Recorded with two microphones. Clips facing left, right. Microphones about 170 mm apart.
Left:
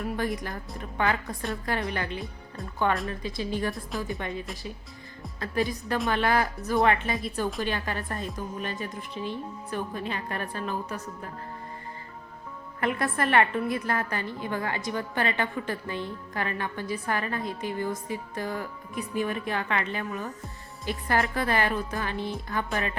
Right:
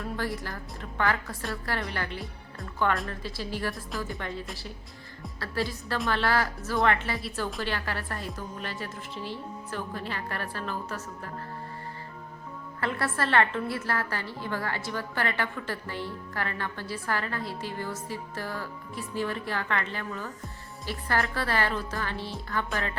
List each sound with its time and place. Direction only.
0.0 s a woman's voice: 20° left (ahead or behind)
12.8 s a woman's voice: 15° left (ahead or behind)